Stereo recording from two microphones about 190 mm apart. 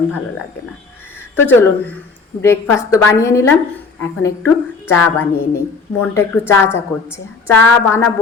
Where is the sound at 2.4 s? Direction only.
15° left (ahead or behind).